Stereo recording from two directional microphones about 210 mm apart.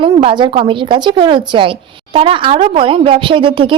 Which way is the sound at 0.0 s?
25° right (ahead or behind).